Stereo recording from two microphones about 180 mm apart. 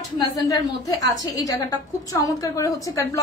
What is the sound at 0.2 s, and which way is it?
A woman's voice, 20° left (ahead or behind).